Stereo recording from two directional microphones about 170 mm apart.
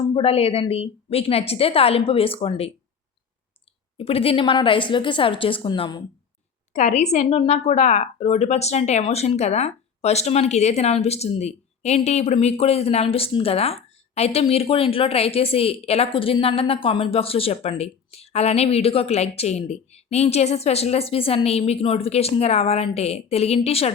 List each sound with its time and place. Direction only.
0.1 s a woman's voice: 35° left (ahead or behind)
3.9 s a woman's voice: 35° left (ahead or behind)
6.7 s a woman's voice: 45° left (ahead or behind)